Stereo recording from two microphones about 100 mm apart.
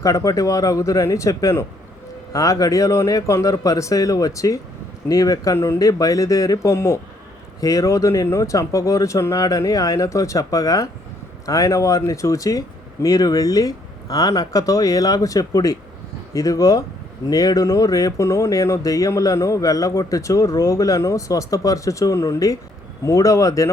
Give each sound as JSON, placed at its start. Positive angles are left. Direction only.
{"t": 0.0, "sound": "speech", "side_deg": 35}